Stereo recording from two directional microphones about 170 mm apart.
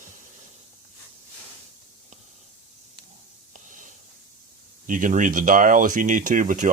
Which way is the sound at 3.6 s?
50° right (ahead or behind).